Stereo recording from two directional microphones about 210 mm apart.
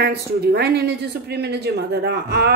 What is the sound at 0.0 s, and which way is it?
Speech, 50° right (ahead or behind).